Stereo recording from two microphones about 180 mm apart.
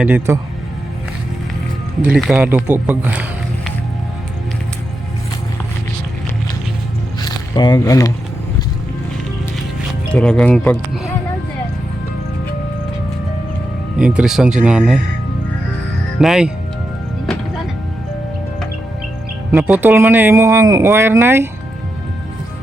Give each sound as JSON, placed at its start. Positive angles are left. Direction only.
{"t": 0.0, "sound": "speech", "side_deg": -10}
{"t": 2.0, "sound": "speech", "side_deg": -5}
{"t": 7.2, "sound": "a sound", "side_deg": 25}
{"t": 10.2, "sound": "speech", "side_deg": 5}
{"t": 14.0, "sound": "speech", "side_deg": -5}
{"t": 16.2, "sound": "speech", "side_deg": 0}
{"t": 19.5, "sound": "speech", "side_deg": -5}